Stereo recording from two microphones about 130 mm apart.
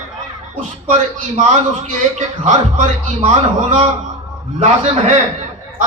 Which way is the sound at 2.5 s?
65° right (ahead or behind).